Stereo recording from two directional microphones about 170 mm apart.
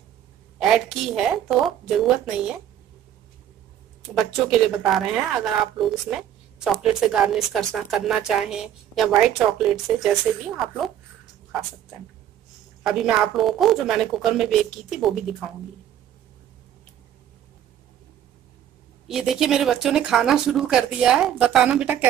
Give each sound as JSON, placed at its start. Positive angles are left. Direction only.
{"t": 0.6, "sound": "a woman's voice", "side_deg": -5}
{"t": 4.2, "sound": "a woman's voice", "side_deg": 0}
{"t": 12.8, "sound": "a woman's voice", "side_deg": -5}
{"t": 19.0, "sound": "a woman's voice", "side_deg": 0}